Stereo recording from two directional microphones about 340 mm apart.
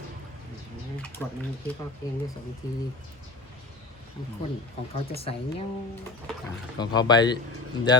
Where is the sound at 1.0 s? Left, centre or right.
Centre.